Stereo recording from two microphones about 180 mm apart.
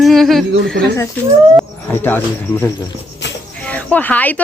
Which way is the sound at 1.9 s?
10° left (ahead or behind).